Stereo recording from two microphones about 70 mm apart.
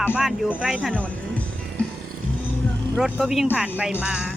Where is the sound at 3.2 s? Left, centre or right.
Centre.